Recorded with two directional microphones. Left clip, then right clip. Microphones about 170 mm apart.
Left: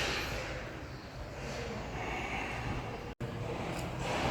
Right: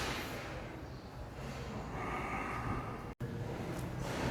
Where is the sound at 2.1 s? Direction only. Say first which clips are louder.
Left 1 dB; 20° right (ahead or behind).